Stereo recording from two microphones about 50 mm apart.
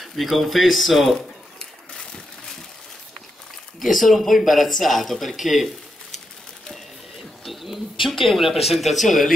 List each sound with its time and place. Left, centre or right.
0.0 s speech: centre
2.0 s vehicle: centre
3.8 s speech: centre
7.4 s speech: centre